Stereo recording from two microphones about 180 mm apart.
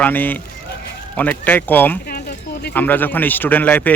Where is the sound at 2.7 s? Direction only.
10° left (ahead or behind).